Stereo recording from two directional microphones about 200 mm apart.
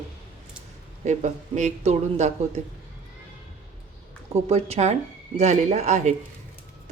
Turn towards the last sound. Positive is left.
turn(degrees=-35)  # may be behind; listen again after turning